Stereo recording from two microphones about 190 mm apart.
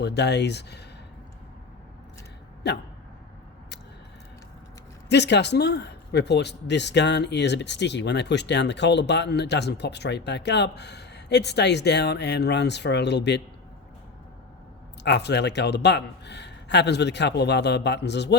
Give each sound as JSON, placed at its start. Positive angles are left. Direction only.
{"t": 0.0, "sound": "speech", "side_deg": 60}
{"t": 2.6, "sound": "speech", "side_deg": 65}
{"t": 5.0, "sound": "speech", "side_deg": 65}
{"t": 15.0, "sound": "speech", "side_deg": 65}